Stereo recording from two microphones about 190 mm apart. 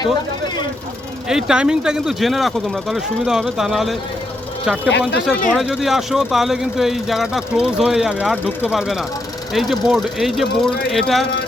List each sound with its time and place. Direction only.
0.0 s vehicle: 20° left (ahead or behind)
1.3 s speech: 5° right (ahead or behind)
4.9 s speech: 65° left (ahead or behind)
5.5 s speech: centre (ahead or behind)